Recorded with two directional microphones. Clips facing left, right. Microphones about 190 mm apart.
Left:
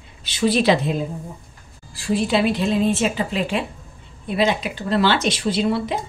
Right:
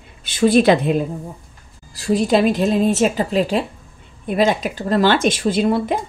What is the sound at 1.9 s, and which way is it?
Speech, 40° right (ahead or behind).